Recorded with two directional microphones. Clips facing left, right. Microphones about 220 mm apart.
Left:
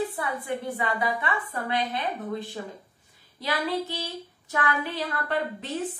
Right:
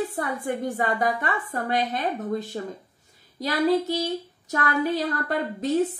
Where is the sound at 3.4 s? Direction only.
40° right (ahead or behind).